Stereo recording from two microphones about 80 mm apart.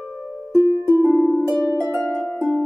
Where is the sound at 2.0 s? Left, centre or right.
Centre.